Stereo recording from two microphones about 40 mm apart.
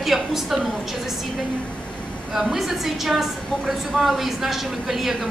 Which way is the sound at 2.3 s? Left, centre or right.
Centre.